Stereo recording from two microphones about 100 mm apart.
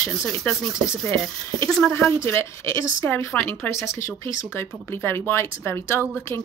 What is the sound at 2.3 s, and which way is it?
Speech, 30° left (ahead or behind).